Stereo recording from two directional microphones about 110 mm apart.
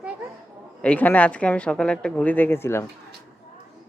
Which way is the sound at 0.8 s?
15° left (ahead or behind).